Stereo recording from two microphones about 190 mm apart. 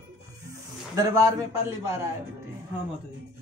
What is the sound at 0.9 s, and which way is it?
Speech, 15° right (ahead or behind).